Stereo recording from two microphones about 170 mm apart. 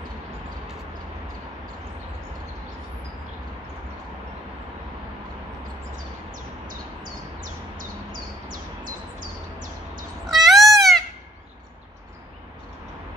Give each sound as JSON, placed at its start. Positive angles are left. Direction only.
{"t": 7.0, "sound": "bird", "side_deg": -50}
{"t": 10.2, "sound": "cat", "side_deg": 0}
{"t": 10.7, "sound": "a sound", "side_deg": 0}